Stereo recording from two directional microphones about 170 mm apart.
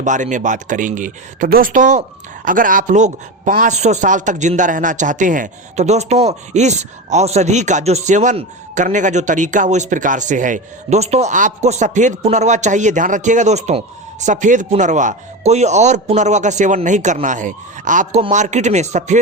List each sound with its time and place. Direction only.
0.0 s a man's voice: 45° right (ahead or behind)